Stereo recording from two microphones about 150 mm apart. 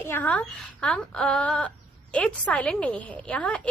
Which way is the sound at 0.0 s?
15° left (ahead or behind).